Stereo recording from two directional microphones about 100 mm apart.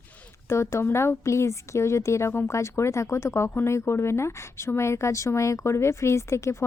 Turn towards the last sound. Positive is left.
turn(degrees=30)  # may be behind; listen again after turning